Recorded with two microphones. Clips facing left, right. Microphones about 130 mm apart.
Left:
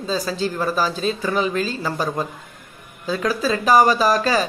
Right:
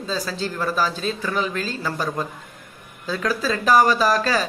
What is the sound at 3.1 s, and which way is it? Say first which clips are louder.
Speech: left 2 dB; 15° left (ahead or behind).